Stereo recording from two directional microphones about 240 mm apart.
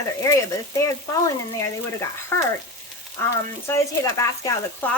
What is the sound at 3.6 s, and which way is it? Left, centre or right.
Speech, centre.